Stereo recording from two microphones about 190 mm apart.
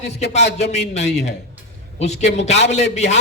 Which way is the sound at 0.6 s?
35° left (ahead or behind).